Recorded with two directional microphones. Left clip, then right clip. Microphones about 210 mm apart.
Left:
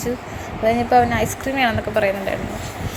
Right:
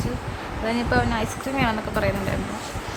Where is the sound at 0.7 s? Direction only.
10° left (ahead or behind).